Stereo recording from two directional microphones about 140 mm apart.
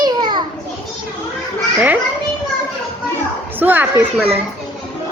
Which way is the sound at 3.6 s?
15° right (ahead or behind).